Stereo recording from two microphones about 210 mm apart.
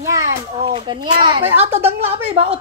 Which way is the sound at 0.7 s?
20° right (ahead or behind).